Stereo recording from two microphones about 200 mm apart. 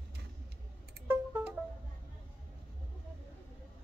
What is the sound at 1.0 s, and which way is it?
Music, 10° right (ahead or behind).